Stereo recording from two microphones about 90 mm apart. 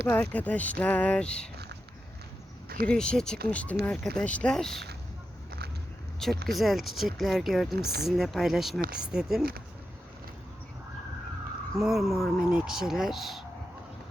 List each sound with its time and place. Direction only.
0.1 s speech: 15° left (ahead or behind)
2.8 s speech: 10° left (ahead or behind)
6.1 s speech: centre (ahead or behind)
11.8 s speech: centre (ahead or behind)